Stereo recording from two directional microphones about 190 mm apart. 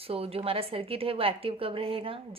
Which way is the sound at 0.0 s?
30° right (ahead or behind).